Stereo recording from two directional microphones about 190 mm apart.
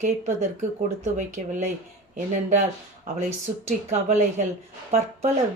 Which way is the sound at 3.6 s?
40° right (ahead or behind).